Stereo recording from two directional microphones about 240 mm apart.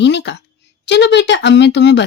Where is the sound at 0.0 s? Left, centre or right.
Left.